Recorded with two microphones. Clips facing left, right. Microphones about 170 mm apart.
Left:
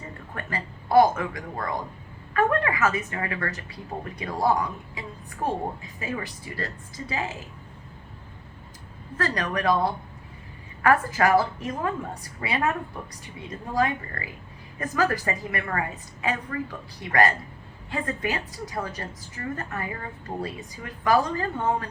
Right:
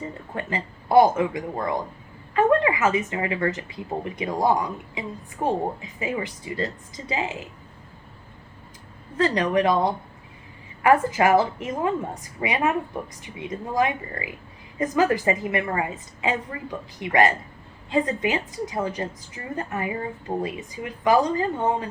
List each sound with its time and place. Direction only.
0.3 s a woman's voice: 20° right (ahead or behind)
9.1 s a woman's voice: 20° right (ahead or behind)